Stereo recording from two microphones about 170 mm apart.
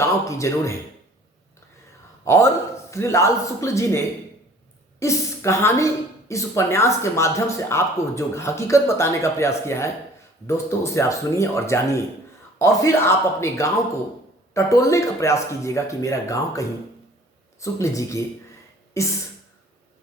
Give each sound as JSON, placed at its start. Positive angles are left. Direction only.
{"t": 0.0, "sound": "speech", "side_deg": 15}
{"t": 2.2, "sound": "a man's voice", "side_deg": 15}